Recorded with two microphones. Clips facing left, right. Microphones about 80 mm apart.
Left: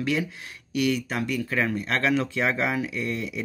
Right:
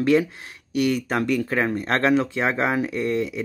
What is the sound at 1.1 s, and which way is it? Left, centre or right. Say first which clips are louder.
Speech: right 5 dB; right.